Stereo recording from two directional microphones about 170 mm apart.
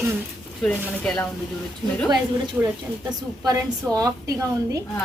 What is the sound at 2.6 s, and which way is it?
Speech, 10° right (ahead or behind).